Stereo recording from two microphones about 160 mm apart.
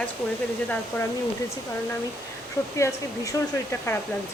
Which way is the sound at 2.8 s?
20° left (ahead or behind).